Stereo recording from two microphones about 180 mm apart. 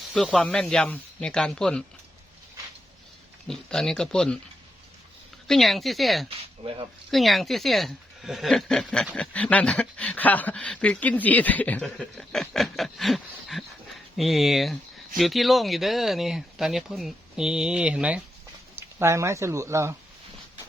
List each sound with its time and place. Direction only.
0.1 s speech: 5° left (ahead or behind)
3.4 s speech: 5° left (ahead or behind)
5.5 s speech: centre (ahead or behind)
6.2 s a sound: 30° right (ahead or behind)
7.1 s speech: centre (ahead or behind)